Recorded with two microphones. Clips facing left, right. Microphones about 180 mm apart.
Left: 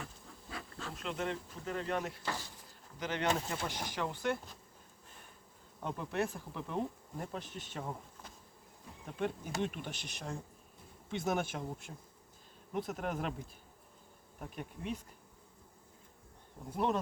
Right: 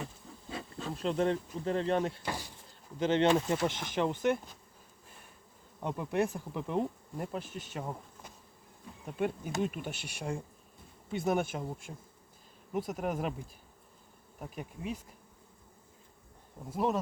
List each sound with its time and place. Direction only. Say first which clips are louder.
0.0 s bee: right 5 dB; 25° right (ahead or behind)
0.9 s speech: right 8 dB; 35° right (ahead or behind)
2.2 s bee: right 2 dB; 15° right (ahead or behind)
3.0 s speech: right 8 dB; 25° right (ahead or behind)
5.8 s bee: right 5 dB; 10° right (ahead or behind)
12.7 s bee: right 3 dB; 5° right (ahead or behind)
14.3 s bee: right 2 dB; 5° right (ahead or behind)
16.6 s bee: right 2 dB; 5° right (ahead or behind)